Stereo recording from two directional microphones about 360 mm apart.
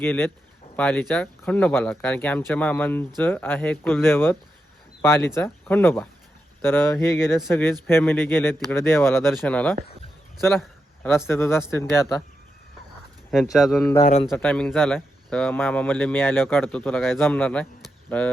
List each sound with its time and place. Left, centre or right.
0.0 s a man's voice: centre
13.3 s speech: centre
14.0 s speech: centre
14.3 s speech: centre